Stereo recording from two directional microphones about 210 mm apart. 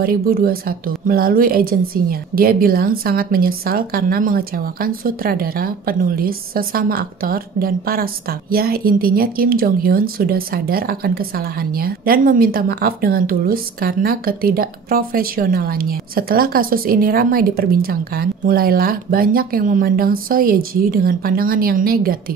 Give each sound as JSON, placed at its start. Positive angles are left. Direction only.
{"t": 0.0, "sound": "a woman's voice", "side_deg": -45}